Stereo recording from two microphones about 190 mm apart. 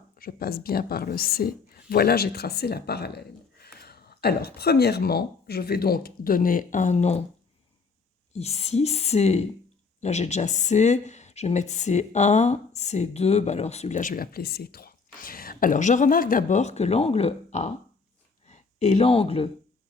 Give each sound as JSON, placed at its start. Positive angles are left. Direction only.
{"t": 0.2, "sound": "speech", "side_deg": 50}
{"t": 8.3, "sound": "speech", "side_deg": 35}